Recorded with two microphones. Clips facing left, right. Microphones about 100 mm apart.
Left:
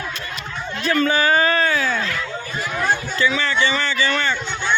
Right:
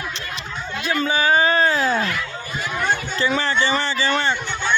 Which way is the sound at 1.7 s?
35° right (ahead or behind).